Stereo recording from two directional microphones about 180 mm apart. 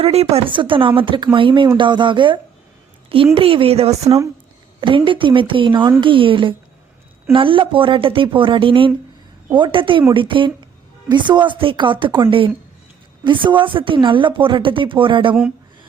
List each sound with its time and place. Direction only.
0.0 s speech: 35° right (ahead or behind)